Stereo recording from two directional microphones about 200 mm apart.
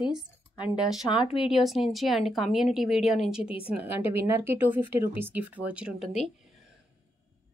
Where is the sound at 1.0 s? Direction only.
25° left (ahead or behind).